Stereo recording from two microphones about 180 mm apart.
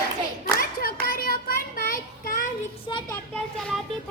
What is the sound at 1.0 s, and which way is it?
Child singing, 55° left (ahead or behind).